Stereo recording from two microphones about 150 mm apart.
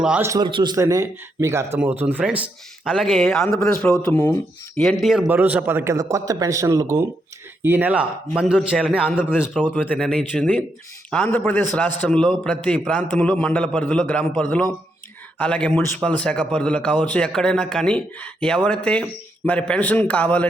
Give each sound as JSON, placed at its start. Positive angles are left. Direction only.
{"t": 0.0, "sound": "a man's voice", "side_deg": -5}
{"t": 0.3, "sound": "a man's voice", "side_deg": -30}
{"t": 9.6, "sound": "a man's voice", "side_deg": 10}